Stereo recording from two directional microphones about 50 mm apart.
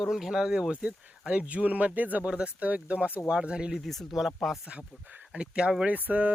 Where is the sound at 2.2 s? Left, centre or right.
Right.